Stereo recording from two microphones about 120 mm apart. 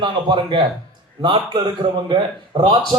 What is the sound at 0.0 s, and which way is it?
A man's voice, 40° right (ahead or behind).